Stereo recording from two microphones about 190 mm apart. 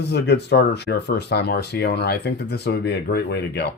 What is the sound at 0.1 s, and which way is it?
Speech, 60° left (ahead or behind).